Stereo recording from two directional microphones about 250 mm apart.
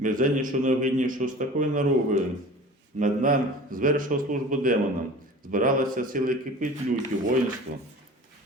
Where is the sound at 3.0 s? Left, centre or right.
Right.